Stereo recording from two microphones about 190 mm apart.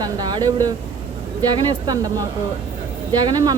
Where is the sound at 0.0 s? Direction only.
20° right (ahead or behind).